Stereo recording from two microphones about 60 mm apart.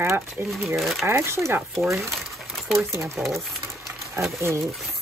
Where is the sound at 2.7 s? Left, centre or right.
Right.